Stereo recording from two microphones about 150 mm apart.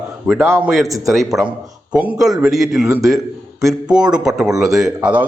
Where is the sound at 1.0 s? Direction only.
Centre (ahead or behind).